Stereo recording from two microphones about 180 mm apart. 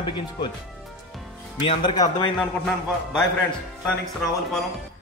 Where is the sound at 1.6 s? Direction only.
30° left (ahead or behind).